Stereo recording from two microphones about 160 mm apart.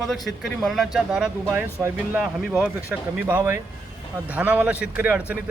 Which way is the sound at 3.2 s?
15° right (ahead or behind).